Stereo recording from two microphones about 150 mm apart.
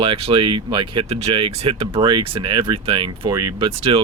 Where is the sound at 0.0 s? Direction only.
40° right (ahead or behind).